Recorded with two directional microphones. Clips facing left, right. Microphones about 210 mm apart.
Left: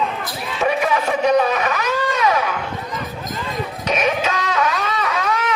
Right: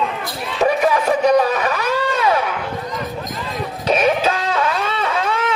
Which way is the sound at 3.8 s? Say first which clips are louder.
Right 4 dB; 30° right (ahead or behind).